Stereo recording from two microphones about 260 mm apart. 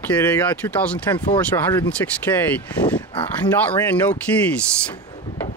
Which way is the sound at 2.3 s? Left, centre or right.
Centre.